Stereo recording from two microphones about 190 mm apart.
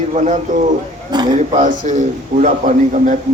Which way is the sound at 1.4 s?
40° right (ahead or behind).